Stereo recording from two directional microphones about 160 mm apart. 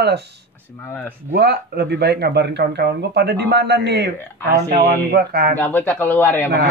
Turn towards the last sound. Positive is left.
turn(degrees=10)  # may be behind; listen again after turning